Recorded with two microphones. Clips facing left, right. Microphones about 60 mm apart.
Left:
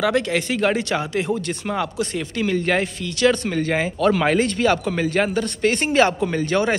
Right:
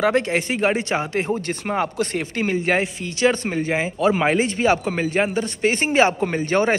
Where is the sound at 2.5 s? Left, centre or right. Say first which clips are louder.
Even; centre.